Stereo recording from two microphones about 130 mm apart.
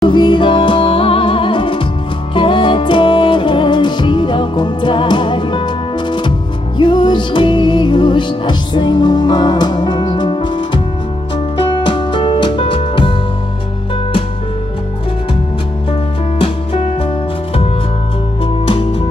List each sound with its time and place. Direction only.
0.0 s music: 40° left (ahead or behind)
6.8 s music: 35° left (ahead or behind)
18.7 s music: 45° left (ahead or behind)